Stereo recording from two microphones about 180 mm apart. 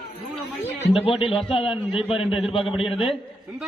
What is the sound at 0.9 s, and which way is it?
Speech, 30° left (ahead or behind).